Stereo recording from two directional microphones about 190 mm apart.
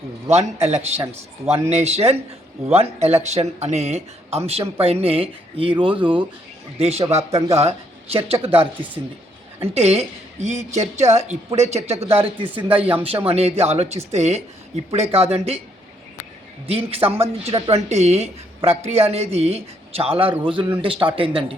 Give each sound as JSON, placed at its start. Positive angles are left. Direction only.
{"t": 0.3, "sound": "a woman's voice", "side_deg": -35}
{"t": 12.5, "sound": "speech", "side_deg": -10}
{"t": 13.2, "sound": "a woman's voice", "side_deg": -35}
{"t": 16.6, "sound": "a woman's voice", "side_deg": -30}